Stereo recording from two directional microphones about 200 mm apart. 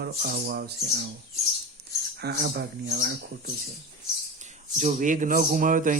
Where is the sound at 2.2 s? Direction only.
55° right (ahead or behind).